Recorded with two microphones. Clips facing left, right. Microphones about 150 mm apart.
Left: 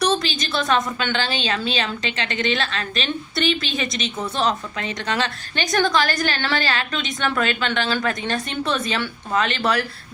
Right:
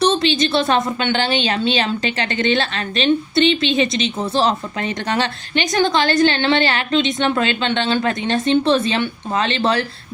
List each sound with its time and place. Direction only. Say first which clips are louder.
0.0 s a woman's voice: right 5 dB; 25° right (ahead or behind)